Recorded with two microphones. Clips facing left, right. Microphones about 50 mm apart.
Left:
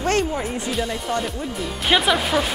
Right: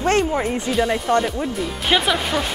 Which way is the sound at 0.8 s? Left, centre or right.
Centre.